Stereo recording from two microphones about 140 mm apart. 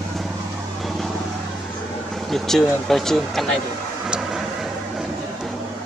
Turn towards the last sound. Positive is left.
turn(degrees=-5)  # may be behind; listen again after turning